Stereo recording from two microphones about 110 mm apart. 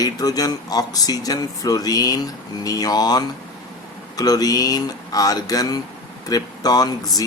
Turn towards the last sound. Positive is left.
turn(degrees=35)  # may be behind; listen again after turning